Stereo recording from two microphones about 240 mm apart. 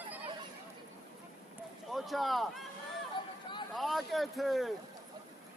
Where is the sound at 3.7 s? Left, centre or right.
Centre.